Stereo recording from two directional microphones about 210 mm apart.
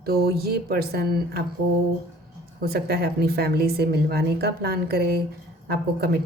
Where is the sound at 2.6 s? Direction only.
50° right (ahead or behind).